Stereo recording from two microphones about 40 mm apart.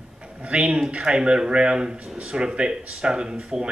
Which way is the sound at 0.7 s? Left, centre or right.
Centre.